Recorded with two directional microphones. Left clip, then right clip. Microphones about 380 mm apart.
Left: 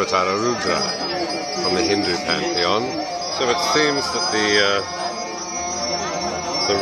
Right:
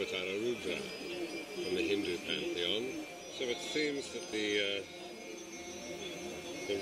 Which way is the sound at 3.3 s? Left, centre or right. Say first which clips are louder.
Left 17 dB; left.